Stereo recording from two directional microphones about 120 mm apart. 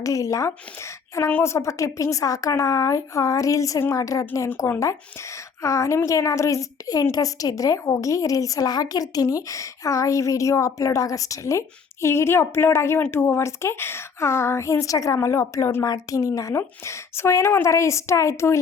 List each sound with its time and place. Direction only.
0.0 s a woman's voice: 30° left (ahead or behind)